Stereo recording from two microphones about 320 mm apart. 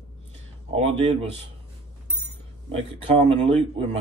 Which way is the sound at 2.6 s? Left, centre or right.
Centre.